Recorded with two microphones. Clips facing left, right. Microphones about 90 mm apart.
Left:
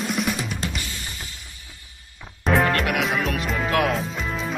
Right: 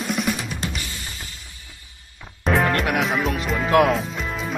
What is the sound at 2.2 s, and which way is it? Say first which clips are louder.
Music: even; centre (ahead or behind).